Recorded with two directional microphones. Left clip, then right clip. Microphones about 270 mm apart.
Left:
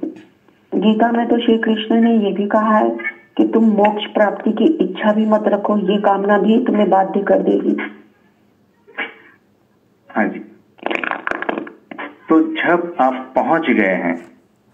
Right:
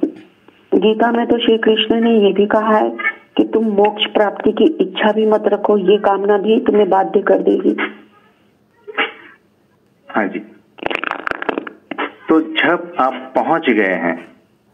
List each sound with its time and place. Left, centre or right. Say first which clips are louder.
0.7 s speech: right 3 dB; right
8.9 s cat: right 7 dB; right
10.0 s a sound: right 1 dB; right
10.9 s music: even; right